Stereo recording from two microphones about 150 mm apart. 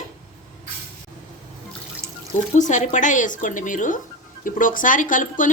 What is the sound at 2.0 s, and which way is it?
Water, 20° right (ahead or behind).